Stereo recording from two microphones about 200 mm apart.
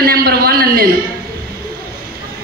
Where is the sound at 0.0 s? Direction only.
50° right (ahead or behind).